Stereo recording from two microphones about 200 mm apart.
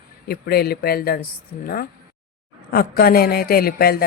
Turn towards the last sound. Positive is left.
turn(degrees=50)  # may be behind; listen again after turning